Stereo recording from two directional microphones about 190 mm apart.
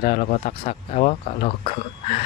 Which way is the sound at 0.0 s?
40° left (ahead or behind).